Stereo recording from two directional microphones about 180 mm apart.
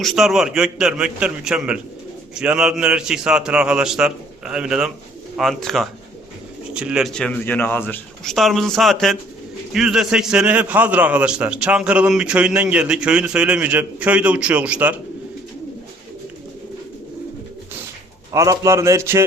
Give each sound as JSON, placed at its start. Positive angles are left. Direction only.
{"t": 0.0, "sound": "a man's voice", "side_deg": 0}
{"t": 18.3, "sound": "a man's voice", "side_deg": -15}